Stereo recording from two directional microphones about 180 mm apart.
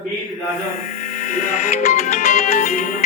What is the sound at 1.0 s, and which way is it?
Music, 45° left (ahead or behind).